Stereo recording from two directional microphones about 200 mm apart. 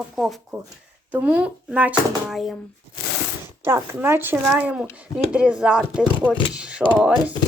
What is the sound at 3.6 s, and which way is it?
A woman's voice, 10° right (ahead or behind).